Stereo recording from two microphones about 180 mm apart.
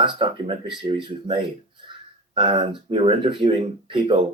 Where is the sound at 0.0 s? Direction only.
25° right (ahead or behind).